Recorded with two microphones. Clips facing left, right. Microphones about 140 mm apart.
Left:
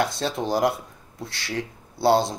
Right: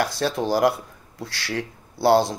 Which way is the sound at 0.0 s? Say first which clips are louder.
Right 2 dB; 20° left (ahead or behind).